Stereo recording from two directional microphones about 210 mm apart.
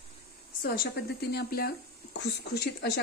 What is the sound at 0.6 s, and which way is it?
Speech, 50° left (ahead or behind).